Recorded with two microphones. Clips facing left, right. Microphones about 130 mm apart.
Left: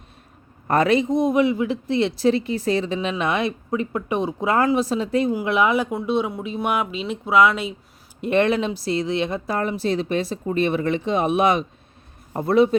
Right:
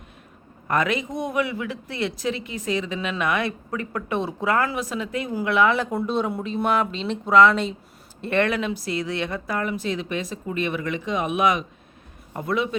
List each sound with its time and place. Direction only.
0.7 s a man's voice: 35° left (ahead or behind)
5.3 s speech: 15° left (ahead or behind)
8.2 s speech: 20° left (ahead or behind)